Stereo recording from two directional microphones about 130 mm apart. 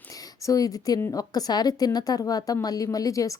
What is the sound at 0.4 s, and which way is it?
A woman's voice, 25° left (ahead or behind).